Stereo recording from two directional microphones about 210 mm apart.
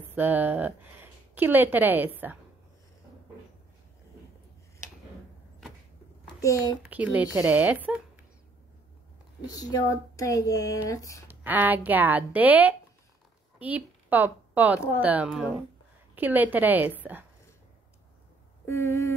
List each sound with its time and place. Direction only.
0.0 s speech: 10° right (ahead or behind)
6.4 s speech: 15° left (ahead or behind)
6.8 s speech: 5° right (ahead or behind)
9.5 s speech: 15° left (ahead or behind)
11.2 s a woman's voice: 10° right (ahead or behind)
18.7 s speech: 10° left (ahead or behind)